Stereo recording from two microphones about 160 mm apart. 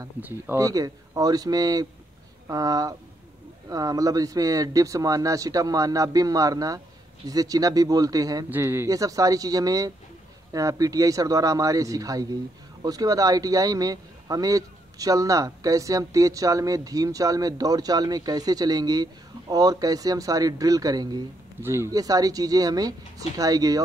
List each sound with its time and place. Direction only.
0.0 s speech: 15° right (ahead or behind)